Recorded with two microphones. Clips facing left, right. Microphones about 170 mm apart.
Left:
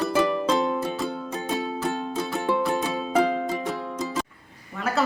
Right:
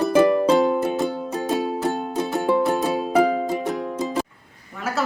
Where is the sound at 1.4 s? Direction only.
40° right (ahead or behind).